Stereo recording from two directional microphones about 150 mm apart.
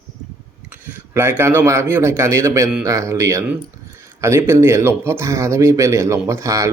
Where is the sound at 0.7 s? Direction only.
10° right (ahead or behind).